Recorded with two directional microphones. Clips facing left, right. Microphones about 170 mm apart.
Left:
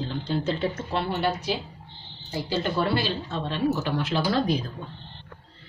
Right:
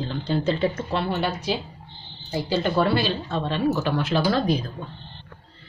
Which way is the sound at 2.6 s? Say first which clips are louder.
Right 4 dB; 90° right.